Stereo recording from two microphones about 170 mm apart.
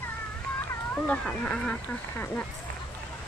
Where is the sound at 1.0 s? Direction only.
5° left (ahead or behind).